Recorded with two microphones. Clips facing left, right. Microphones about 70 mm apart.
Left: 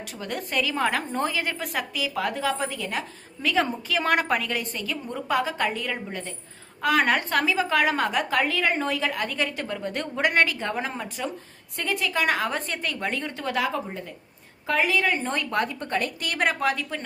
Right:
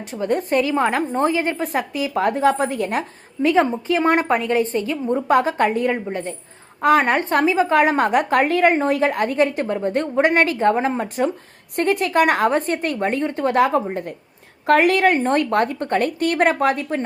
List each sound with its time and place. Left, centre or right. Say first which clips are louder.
0.0 s a woman's voice: right 11 dB; right
3.4 s a woman's voice: right 8 dB; right
6.1 s a woman's voice: right 8 dB; right
14.7 s a woman's voice: right 9 dB; right